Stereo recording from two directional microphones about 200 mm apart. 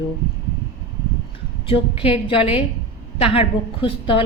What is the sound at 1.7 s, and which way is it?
A woman's voice, 30° left (ahead or behind).